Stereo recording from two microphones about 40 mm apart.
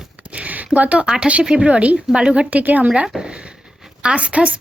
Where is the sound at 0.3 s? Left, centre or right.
Right.